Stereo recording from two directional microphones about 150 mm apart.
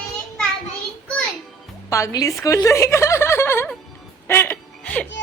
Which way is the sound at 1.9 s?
20° left (ahead or behind).